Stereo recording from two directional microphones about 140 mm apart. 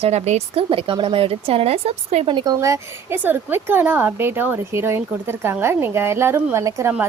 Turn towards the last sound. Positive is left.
turn(degrees=-20)  # may be behind; listen again after turning